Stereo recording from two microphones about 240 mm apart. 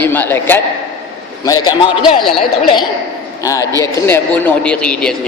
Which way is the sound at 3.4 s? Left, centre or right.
Centre.